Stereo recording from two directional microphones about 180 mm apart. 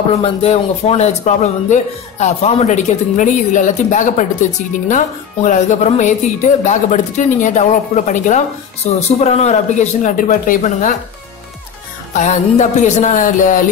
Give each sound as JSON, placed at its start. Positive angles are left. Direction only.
{"t": 0.1, "sound": "speech", "side_deg": 35}
{"t": 12.1, "sound": "speech", "side_deg": 40}